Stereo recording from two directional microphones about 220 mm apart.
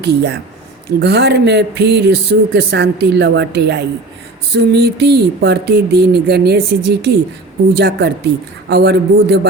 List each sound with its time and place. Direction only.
0.0 s speech: 50° right (ahead or behind)